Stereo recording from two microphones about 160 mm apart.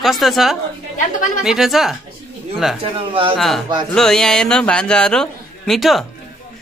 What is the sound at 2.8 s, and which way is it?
Speech, 35° right (ahead or behind).